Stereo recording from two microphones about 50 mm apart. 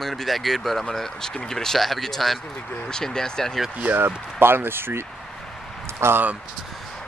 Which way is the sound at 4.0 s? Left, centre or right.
Right.